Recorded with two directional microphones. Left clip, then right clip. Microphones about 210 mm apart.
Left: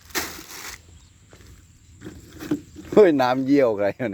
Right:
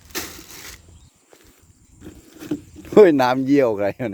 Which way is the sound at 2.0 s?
15° right (ahead or behind).